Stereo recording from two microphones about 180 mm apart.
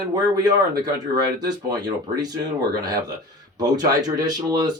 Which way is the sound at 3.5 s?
20° right (ahead or behind).